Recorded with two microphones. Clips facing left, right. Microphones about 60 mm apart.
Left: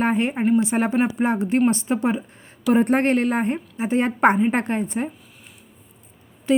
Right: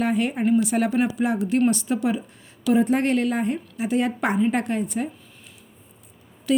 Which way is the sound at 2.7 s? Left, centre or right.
Left.